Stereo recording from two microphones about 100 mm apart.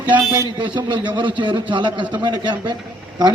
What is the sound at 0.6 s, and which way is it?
A man's voice, 50° right (ahead or behind).